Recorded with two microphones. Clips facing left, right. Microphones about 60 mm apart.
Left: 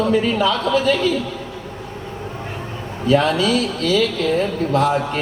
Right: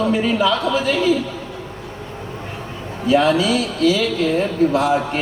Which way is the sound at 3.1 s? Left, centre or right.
Left.